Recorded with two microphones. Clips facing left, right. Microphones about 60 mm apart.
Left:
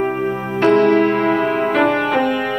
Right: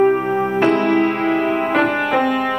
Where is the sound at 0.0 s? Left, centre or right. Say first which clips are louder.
Right 5 dB; centre.